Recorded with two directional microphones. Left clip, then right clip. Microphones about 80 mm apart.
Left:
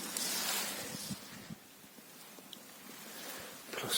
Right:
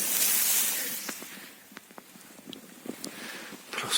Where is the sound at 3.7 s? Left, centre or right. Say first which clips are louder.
Right 6 dB; centre.